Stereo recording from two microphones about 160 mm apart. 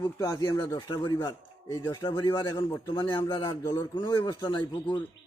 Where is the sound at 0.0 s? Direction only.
25° left (ahead or behind).